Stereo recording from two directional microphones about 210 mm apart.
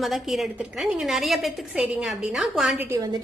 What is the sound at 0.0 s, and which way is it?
A woman's voice, centre (ahead or behind).